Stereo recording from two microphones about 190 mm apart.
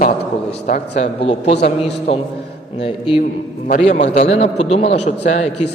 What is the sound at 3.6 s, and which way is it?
A man's voice, 40° left (ahead or behind).